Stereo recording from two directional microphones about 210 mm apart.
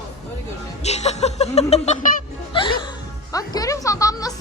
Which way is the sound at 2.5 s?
25° left (ahead or behind).